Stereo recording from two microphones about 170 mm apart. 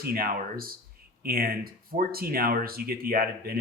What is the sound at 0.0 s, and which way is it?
Speech, 60° right (ahead or behind).